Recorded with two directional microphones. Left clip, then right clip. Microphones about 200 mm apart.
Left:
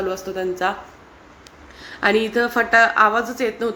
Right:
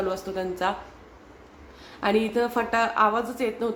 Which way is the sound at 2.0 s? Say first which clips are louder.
Left 5 dB; 5° left (ahead or behind).